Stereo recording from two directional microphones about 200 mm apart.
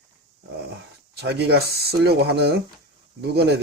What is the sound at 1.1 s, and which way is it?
Speech, 55° right (ahead or behind).